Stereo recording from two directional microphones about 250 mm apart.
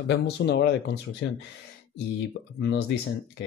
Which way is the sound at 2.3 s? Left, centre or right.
Left.